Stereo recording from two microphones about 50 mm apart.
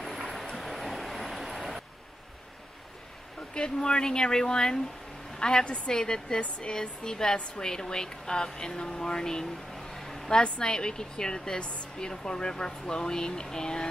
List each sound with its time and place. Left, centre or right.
0.0 s vehicle: centre
3.5 s speech: centre
10.4 s speech: centre
12.1 s speech: centre